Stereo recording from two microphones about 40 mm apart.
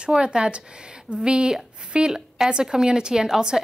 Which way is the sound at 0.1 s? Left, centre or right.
Centre.